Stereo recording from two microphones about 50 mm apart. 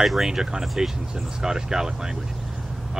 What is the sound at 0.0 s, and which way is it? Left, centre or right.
Speech, centre.